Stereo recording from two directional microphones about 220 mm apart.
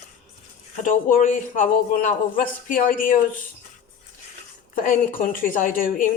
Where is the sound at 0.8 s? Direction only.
35° left (ahead or behind).